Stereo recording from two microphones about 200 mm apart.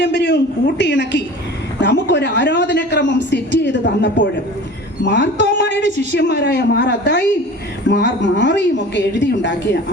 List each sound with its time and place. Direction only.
0.0 s a man's voice: 60° left (ahead or behind)